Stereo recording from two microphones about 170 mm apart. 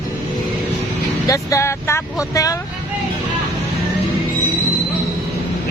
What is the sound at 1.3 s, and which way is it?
Speech, 15° left (ahead or behind).